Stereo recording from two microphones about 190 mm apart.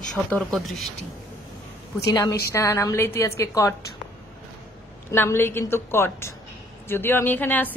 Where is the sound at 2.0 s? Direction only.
15° left (ahead or behind).